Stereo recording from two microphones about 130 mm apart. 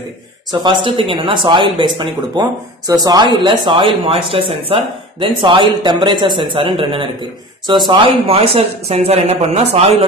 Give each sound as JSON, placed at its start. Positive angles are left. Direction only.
{"t": 0.5, "sound": "speech", "side_deg": -40}